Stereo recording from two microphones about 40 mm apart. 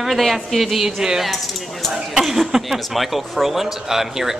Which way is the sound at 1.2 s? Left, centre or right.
Centre.